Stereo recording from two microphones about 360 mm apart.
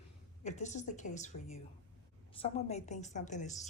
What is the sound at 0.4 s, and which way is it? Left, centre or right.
A woman's voice, centre.